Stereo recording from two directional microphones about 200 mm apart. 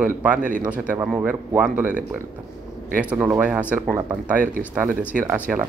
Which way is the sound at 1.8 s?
40° right (ahead or behind).